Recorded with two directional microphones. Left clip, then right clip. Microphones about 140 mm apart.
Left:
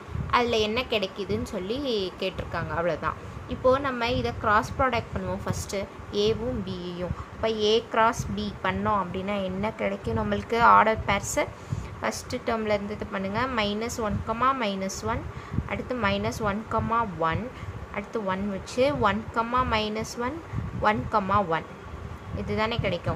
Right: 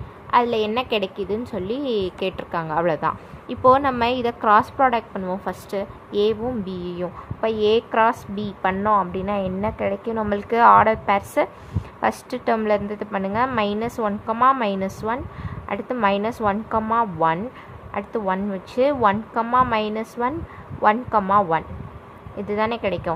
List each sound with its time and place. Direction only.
0.3 s a woman's voice: 30° right (ahead or behind)
4.7 s a woman's voice: 30° right (ahead or behind)